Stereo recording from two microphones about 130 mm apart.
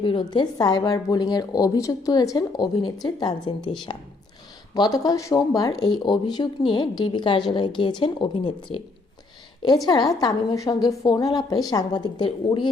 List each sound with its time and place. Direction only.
0.0 s a woman's voice: 40° left (ahead or behind)
9.8 s a woman's voice: 30° left (ahead or behind)